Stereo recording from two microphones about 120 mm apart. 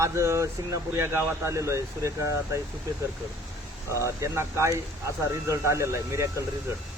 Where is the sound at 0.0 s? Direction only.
25° right (ahead or behind).